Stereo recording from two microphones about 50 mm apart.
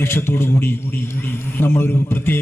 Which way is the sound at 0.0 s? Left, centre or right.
Left.